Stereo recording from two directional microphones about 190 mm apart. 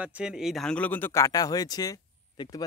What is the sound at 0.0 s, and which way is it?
Speech, 5° right (ahead or behind).